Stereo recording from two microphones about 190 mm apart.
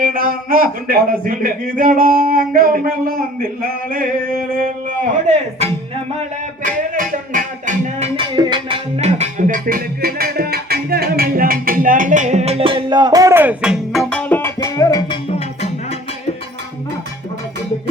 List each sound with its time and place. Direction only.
0.0 s a man's voice: 45° right (ahead or behind)
6.9 s music: 45° right (ahead or behind); by 8.8 s 25° right (ahead or behind)
9.0 s music: 35° right (ahead or behind); by 15.2 s 20° left (ahead or behind)